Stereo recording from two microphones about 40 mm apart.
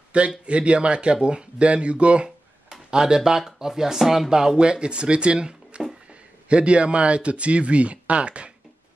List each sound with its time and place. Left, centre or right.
0.1 s a man's voice: right
2.7 s a sound: centre
3.2 s speech: centre; by 8.5 s right